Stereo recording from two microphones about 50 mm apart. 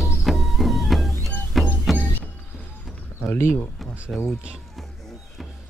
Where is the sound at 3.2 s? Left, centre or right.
Left.